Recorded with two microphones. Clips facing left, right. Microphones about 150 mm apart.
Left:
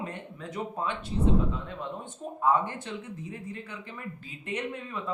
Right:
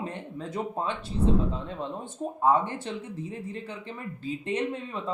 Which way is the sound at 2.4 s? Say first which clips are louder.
Right 2 dB; 30° right (ahead or behind).